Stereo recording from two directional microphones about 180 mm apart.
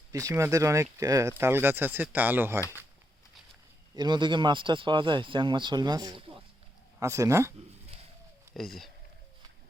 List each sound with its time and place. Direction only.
0.1 s speech: 20° right (ahead or behind)
2.6 s speech: 15° left (ahead or behind)
3.9 s speech: 25° right (ahead or behind)
7.0 s speech: 15° right (ahead or behind)
8.5 s speech: centre (ahead or behind)